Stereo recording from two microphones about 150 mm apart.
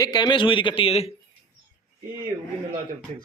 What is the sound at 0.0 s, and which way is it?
A man's voice, 25° left (ahead or behind).